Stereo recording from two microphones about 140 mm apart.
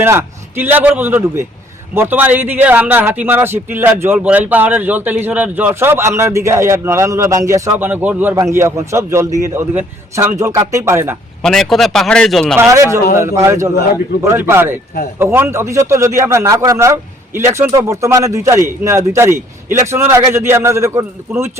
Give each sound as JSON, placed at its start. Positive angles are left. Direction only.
{"t": 0.0, "sound": "a man's voice", "side_deg": -15}
{"t": 11.4, "sound": "speech", "side_deg": 5}
{"t": 12.5, "sound": "a man's voice", "side_deg": -20}